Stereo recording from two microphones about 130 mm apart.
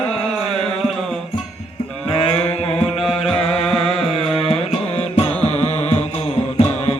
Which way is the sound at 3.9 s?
50° left (ahead or behind).